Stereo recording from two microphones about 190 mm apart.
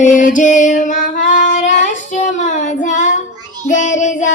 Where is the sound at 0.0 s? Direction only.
40° left (ahead or behind).